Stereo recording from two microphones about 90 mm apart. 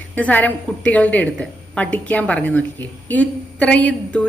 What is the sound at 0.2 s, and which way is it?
A woman's voice, 20° left (ahead or behind).